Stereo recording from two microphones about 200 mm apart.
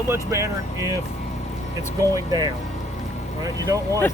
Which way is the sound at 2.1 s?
20° right (ahead or behind).